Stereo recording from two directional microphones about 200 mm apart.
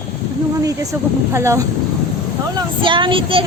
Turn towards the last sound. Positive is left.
turn(degrees=-25)  # may be behind; listen again after turning